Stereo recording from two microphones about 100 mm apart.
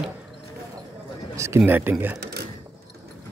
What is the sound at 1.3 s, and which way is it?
Speech, 25° right (ahead or behind).